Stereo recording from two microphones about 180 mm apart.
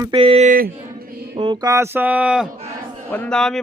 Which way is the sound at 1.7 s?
15° right (ahead or behind).